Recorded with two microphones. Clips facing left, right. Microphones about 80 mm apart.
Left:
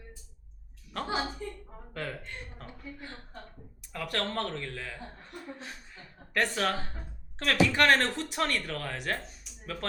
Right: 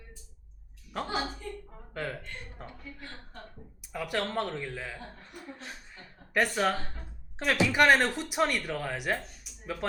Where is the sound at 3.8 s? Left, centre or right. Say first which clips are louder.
Right 1 dB; centre.